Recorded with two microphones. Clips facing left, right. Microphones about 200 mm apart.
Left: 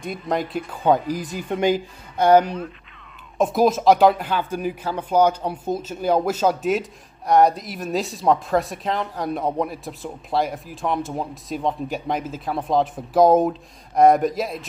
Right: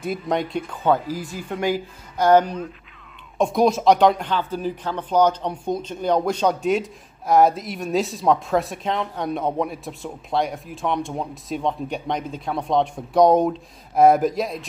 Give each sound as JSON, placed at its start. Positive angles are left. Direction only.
{"t": 0.0, "sound": "speech", "side_deg": 0}
{"t": 0.8, "sound": "speech", "side_deg": 15}